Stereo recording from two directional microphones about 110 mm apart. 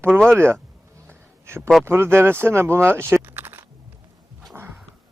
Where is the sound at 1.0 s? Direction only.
20° right (ahead or behind).